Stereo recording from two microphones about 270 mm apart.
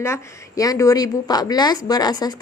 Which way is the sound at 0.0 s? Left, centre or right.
Centre.